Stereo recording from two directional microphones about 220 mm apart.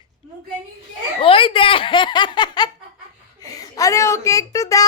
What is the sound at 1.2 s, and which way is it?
Giggle, 25° left (ahead or behind).